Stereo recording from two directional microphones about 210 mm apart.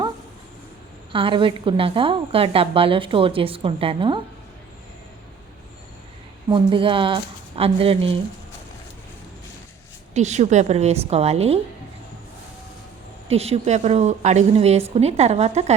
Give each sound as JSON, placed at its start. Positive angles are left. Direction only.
{"t": 1.1, "sound": "a woman's voice", "side_deg": -25}
{"t": 6.5, "sound": "a woman's voice", "side_deg": -25}
{"t": 10.2, "sound": "a woman's voice", "side_deg": -35}
{"t": 13.2, "sound": "a woman's voice", "side_deg": -30}